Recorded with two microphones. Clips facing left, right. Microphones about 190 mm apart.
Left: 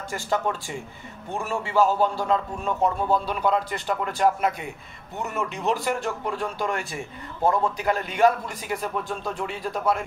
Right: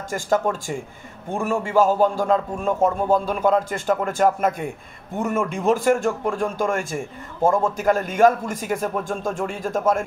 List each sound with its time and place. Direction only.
0.1 s speech: 45° right (ahead or behind)